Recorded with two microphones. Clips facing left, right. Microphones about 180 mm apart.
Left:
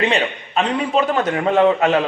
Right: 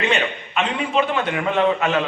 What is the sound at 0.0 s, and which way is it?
A man's voice, 35° left (ahead or behind).